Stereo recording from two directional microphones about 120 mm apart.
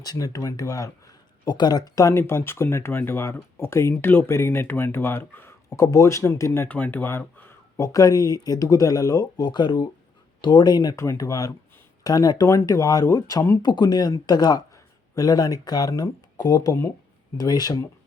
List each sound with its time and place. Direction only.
0.0 s speech: 30° left (ahead or behind)
7.9 s speech: 30° left (ahead or behind)